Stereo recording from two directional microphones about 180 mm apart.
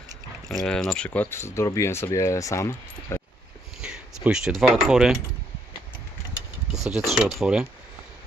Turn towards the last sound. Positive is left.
turn(degrees=-5)  # may be behind; listen again after turning